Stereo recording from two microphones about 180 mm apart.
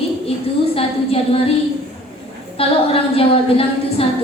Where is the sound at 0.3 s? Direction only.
30° left (ahead or behind).